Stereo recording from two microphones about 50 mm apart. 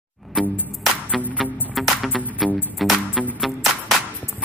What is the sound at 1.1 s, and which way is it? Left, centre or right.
Music, centre.